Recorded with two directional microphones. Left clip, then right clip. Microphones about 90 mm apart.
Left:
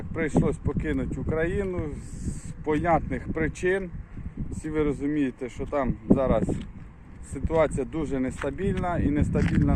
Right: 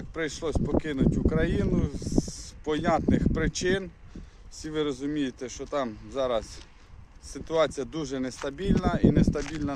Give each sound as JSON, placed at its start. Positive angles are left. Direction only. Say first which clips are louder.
{"t": 0.1, "sound": "speech", "louder": "left 4 dB", "side_deg": -60}
{"t": 2.6, "sound": "speech", "louder": "left 2 dB", "side_deg": -65}
{"t": 9.4, "sound": "speech", "louder": "left 6 dB", "side_deg": 20}